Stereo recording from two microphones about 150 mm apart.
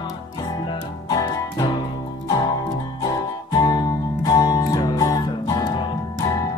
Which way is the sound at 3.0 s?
25° left (ahead or behind).